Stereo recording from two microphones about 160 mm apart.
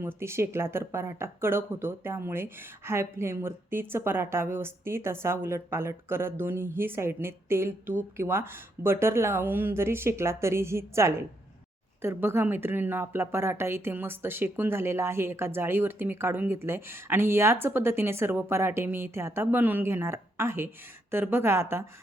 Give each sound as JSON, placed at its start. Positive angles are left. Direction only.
{"t": 0.0, "sound": "speech", "side_deg": -15}